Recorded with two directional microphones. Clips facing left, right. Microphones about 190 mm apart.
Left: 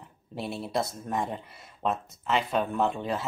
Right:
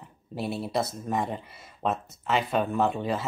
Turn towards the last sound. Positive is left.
turn(degrees=0)  # may be behind; listen again after turning